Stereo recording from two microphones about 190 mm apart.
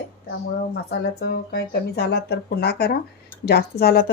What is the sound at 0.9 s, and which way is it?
A woman's voice, 60° left (ahead or behind).